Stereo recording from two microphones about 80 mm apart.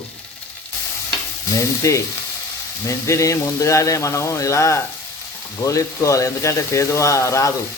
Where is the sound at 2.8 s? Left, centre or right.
Left.